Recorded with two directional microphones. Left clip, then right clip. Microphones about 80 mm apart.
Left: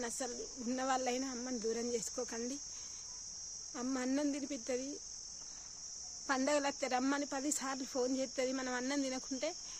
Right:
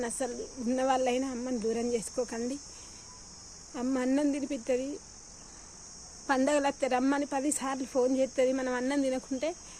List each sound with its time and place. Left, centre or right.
0.0 s speech: left
3.8 s speech: left
6.2 s speech: left